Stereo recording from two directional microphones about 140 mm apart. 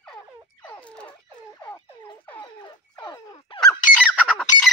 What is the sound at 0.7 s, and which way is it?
Fowl, 10° left (ahead or behind).